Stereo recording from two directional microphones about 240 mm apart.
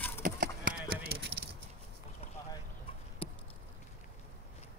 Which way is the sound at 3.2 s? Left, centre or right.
Left.